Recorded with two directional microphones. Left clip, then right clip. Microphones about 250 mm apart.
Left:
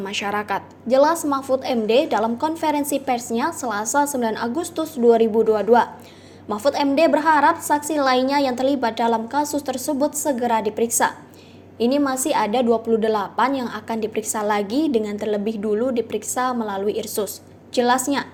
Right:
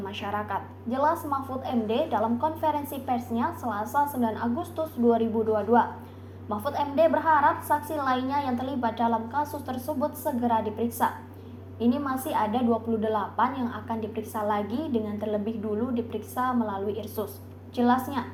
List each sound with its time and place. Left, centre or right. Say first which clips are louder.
0.0 s a woman's voice: left 7 dB; left